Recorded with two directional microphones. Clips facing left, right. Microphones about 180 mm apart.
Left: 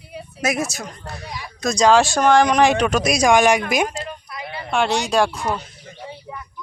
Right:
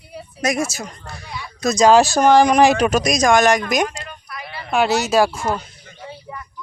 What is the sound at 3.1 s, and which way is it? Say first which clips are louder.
Speech: left 1 dB; 10° left (ahead or behind).